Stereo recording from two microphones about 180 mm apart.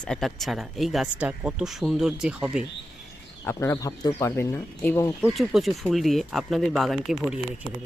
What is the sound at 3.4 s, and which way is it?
Speech, 15° left (ahead or behind).